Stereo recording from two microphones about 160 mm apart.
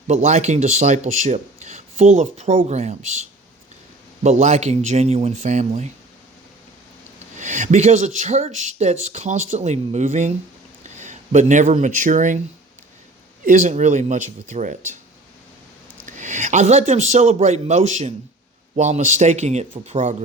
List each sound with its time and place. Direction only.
0.1 s speech: 45° right (ahead or behind)
4.2 s speech: 45° right (ahead or behind)
7.3 s speech: 50° right (ahead or behind)
13.4 s speech: 55° right (ahead or behind)
16.0 s speech: 50° right (ahead or behind)